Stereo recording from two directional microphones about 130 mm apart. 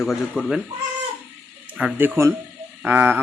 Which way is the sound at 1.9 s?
15° right (ahead or behind).